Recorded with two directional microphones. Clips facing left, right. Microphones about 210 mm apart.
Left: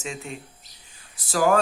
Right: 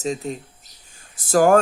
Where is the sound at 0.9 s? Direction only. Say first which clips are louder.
Right 10 dB; 45° right (ahead or behind).